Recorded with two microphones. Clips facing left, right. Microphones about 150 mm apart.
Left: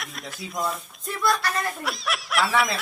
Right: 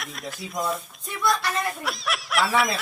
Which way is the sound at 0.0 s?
Centre (ahead or behind).